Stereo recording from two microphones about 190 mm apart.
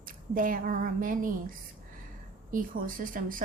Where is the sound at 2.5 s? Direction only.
45° right (ahead or behind).